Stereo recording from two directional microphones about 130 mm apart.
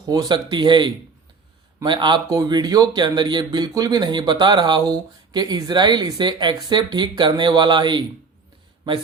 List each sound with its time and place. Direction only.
0.0 s speech: 30° right (ahead or behind)